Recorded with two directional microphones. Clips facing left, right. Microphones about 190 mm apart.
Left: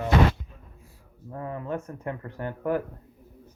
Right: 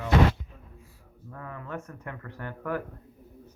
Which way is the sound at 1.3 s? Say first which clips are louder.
Left 6 dB; 25° left (ahead or behind).